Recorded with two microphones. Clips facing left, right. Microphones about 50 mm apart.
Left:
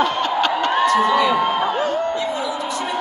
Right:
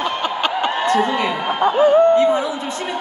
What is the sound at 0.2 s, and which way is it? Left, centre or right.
Snicker, centre.